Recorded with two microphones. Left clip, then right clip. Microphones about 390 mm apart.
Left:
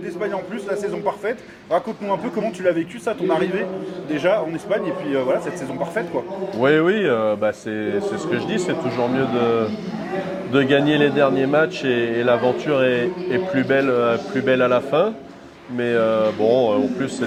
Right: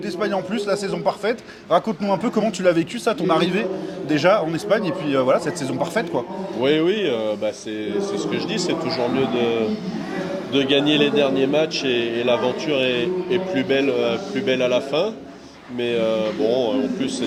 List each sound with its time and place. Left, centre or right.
0.2 s a man's voice: right
6.6 s speech: left
9.1 s speech: left